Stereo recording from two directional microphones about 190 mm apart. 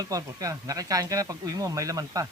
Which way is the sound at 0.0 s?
15° right (ahead or behind).